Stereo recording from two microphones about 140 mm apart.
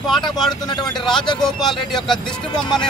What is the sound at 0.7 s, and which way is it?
Speech, 35° left (ahead or behind).